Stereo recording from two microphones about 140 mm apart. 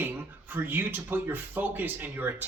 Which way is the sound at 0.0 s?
15° right (ahead or behind).